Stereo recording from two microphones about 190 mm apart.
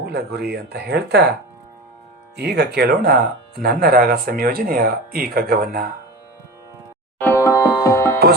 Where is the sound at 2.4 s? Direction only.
60° right (ahead or behind).